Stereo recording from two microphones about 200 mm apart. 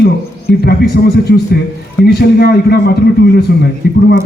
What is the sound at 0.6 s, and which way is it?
A man's voice, 50° left (ahead or behind).